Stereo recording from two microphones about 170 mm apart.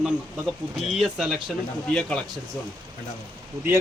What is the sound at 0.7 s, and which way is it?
Speech, 5° right (ahead or behind).